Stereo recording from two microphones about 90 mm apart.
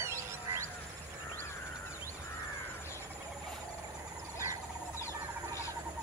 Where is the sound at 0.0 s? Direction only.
30° right (ahead or behind).